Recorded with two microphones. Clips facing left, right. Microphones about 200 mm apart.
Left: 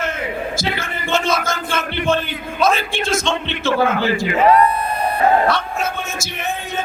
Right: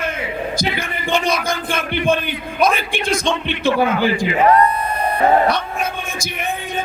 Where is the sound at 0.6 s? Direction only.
15° right (ahead or behind).